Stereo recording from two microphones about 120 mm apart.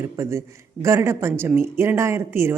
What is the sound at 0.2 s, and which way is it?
A woman's voice, 25° right (ahead or behind).